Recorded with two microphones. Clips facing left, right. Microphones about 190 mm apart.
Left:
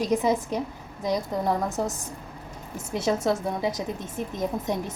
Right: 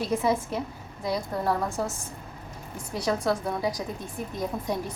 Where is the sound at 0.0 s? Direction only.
20° left (ahead or behind).